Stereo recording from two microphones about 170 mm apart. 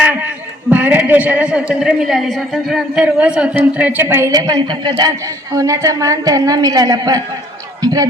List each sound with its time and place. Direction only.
0.7 s a woman's voice: 10° right (ahead or behind)